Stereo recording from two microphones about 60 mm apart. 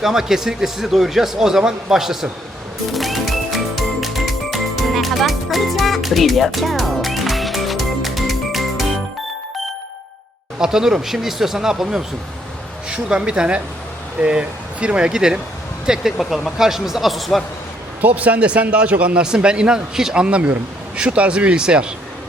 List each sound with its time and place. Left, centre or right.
0.0 s a man's voice: centre
2.9 s music: centre
10.6 s a man's voice: centre
18.0 s a man's voice: right